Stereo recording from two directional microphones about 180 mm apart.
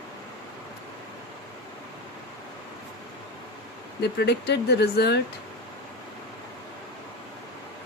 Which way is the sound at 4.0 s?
65° left (ahead or behind).